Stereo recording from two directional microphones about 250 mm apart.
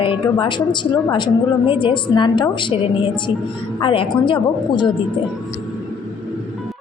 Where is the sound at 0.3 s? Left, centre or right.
Centre.